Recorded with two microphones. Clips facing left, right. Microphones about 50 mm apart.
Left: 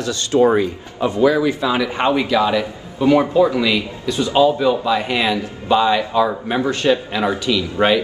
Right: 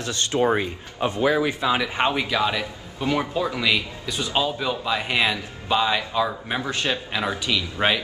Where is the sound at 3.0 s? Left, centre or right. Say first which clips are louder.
Left 10 dB; left.